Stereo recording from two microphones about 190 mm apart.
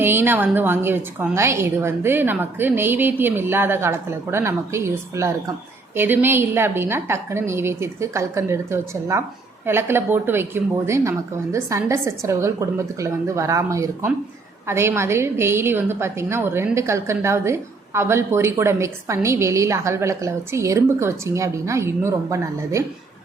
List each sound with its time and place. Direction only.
0.0 s a woman's voice: 10° right (ahead or behind)